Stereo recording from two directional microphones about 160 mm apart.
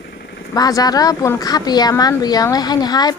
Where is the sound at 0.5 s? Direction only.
25° left (ahead or behind).